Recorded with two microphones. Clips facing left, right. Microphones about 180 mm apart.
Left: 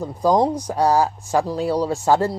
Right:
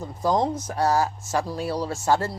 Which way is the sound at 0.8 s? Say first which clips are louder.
Left 4 dB; 15° left (ahead or behind).